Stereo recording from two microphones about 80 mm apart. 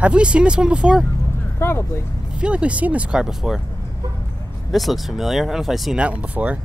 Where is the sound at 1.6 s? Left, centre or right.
Left.